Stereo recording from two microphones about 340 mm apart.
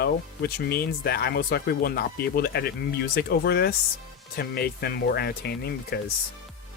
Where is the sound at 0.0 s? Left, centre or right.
Left.